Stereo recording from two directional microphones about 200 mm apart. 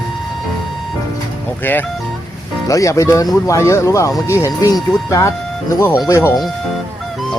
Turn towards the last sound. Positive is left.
turn(degrees=15)  # may be behind; listen again after turning